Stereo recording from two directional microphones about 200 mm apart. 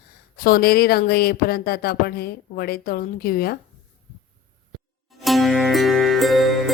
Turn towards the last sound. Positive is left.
turn(degrees=0)  # may be behind; listen again after turning